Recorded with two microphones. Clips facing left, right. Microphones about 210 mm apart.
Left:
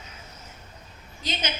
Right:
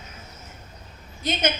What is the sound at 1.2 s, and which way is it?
Speech, 55° right (ahead or behind).